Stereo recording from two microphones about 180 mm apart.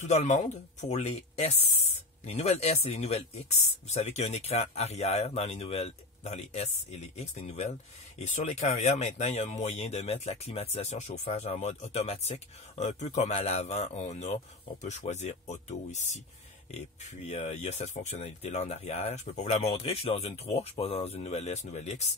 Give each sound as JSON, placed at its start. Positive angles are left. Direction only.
{"t": 0.0, "sound": "speech", "side_deg": 40}